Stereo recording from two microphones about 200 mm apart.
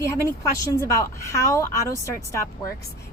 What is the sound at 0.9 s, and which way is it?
Speech, 15° left (ahead or behind).